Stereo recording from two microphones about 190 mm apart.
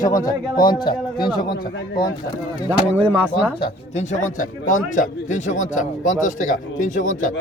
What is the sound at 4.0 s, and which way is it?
Speech, 40° left (ahead or behind).